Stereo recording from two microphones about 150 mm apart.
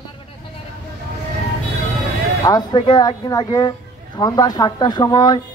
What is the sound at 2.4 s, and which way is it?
Speech, 30° left (ahead or behind).